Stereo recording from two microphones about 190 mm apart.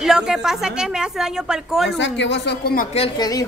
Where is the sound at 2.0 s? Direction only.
70° left (ahead or behind).